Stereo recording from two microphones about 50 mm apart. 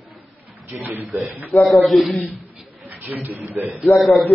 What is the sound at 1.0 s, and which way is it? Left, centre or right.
A man's voice, centre.